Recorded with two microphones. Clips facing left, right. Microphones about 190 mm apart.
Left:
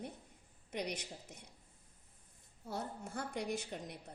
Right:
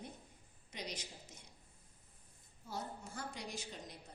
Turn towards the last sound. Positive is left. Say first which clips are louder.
# left 7 dB
turn(degrees=60)  # may be behind; listen again after turning